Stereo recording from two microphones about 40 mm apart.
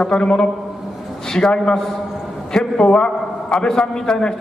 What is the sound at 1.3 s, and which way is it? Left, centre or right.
Speech, centre.